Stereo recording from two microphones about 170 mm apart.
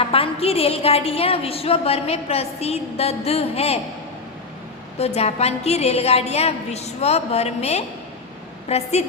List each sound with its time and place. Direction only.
0.0 s a woman's voice: 35° left (ahead or behind)
4.9 s a woman's voice: 40° left (ahead or behind)